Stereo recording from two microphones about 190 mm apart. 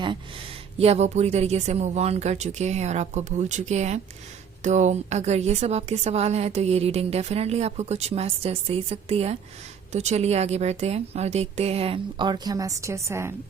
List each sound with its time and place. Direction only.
0.8 s a woman's voice: 35° right (ahead or behind); by 13.3 s 15° right (ahead or behind)